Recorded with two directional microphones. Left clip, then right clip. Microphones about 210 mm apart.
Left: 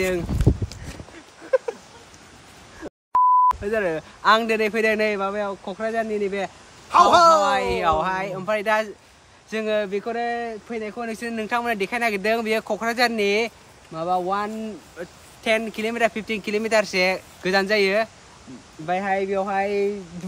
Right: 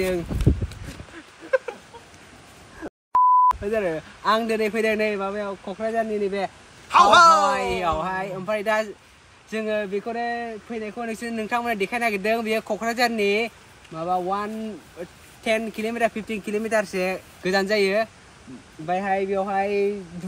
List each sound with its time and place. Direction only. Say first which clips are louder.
0.0 s a sound: left 1 dB; centre (ahead or behind)
3.1 s sidetone: even; centre (ahead or behind)
3.7 s speech: left 1 dB; 5° left (ahead or behind)
6.9 s speech: right 1 dB; 50° left (ahead or behind)
7.8 s speech: left 3 dB; 5° left (ahead or behind)
17.4 s speech: left 1 dB; centre (ahead or behind)